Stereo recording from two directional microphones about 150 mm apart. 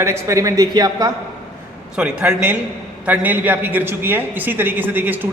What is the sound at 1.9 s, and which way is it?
A man's voice, 5° right (ahead or behind).